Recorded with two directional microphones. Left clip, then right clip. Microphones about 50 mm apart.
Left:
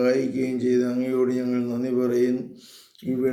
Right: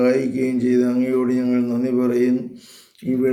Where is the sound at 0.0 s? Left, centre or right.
Right.